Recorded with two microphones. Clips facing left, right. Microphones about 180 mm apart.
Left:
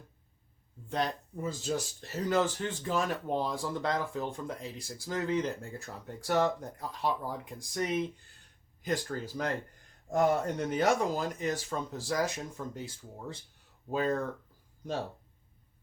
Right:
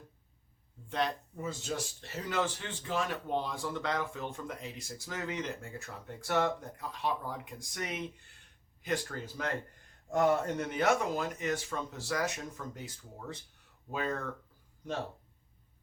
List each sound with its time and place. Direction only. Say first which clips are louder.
0.9 s speech: left 1 dB; 40° left (ahead or behind)